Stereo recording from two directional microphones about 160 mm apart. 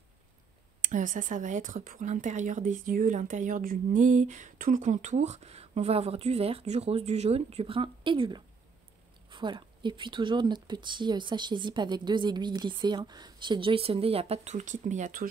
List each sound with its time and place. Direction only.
0.8 s a woman's voice: 55° right (ahead or behind)